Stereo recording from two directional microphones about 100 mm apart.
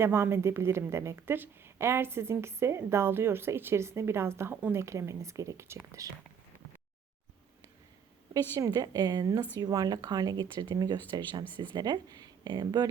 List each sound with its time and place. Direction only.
0.0 s a woman's voice: 25° right (ahead or behind)
8.3 s speech: 35° right (ahead or behind)